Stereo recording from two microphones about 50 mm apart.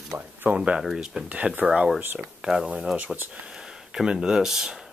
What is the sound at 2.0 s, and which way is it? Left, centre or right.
Speech, right.